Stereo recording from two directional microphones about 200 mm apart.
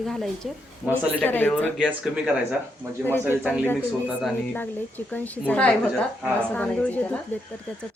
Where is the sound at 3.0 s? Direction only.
10° left (ahead or behind).